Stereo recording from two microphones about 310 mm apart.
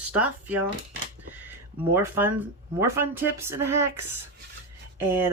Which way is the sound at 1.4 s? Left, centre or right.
Centre.